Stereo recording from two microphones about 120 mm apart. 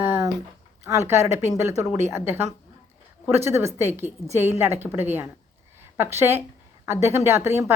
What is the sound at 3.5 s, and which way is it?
A woman's voice, 20° right (ahead or behind).